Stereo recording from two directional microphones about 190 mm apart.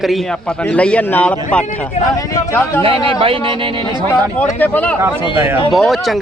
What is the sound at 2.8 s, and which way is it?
Speech, 30° right (ahead or behind).